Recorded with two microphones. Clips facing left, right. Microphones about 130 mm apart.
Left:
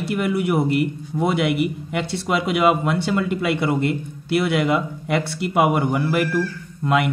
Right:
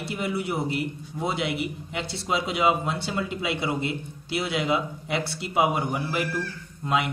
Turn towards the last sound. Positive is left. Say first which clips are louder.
# left 6 dB
turn(degrees=60)  # may be behind; listen again after turning